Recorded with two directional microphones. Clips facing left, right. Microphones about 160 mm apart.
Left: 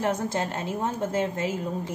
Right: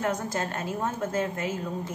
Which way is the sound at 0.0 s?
25° left (ahead or behind).